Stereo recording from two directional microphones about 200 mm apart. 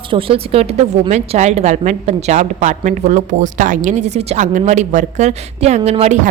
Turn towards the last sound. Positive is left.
turn(degrees=-35)  # may be behind; listen again after turning